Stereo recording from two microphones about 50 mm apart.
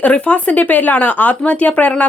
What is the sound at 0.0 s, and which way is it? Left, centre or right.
Speech, left.